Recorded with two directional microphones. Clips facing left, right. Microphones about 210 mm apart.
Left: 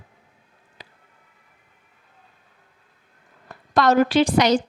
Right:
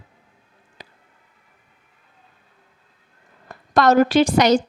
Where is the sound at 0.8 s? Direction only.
45° right (ahead or behind).